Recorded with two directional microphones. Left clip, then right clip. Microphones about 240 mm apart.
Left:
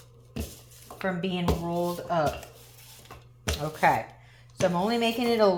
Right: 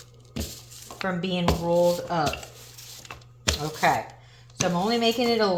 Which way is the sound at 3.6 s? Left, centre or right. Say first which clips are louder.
Left 1 dB; left.